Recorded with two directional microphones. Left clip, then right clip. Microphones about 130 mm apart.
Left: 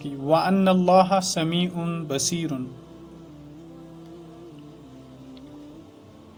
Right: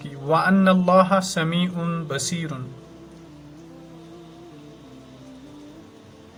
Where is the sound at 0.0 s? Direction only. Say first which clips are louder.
Right 1 dB; 55° left (ahead or behind).